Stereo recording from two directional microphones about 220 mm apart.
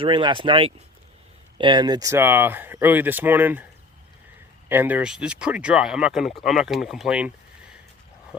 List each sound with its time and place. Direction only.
0.0 s speech: 20° right (ahead or behind)
4.7 s speech: 10° right (ahead or behind)